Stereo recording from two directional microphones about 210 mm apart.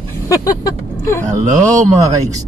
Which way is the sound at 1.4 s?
35° right (ahead or behind).